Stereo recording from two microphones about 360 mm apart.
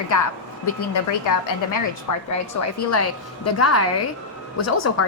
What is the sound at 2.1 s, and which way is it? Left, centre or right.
Speech, left.